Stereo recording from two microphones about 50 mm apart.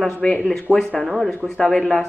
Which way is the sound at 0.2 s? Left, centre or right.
Left.